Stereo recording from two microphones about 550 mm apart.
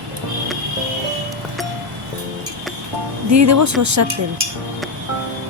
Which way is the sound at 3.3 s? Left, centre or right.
Right.